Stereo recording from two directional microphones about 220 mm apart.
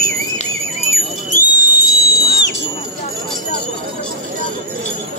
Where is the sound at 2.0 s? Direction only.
50° left (ahead or behind).